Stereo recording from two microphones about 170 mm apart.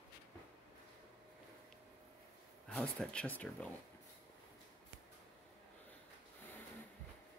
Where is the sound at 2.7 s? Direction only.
5° left (ahead or behind).